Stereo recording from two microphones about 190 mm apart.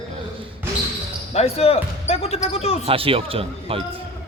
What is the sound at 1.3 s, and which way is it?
Speech, 30° left (ahead or behind).